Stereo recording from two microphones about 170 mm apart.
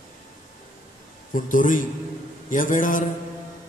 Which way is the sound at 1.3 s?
50° left (ahead or behind).